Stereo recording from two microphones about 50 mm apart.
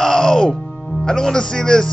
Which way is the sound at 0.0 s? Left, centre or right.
Centre.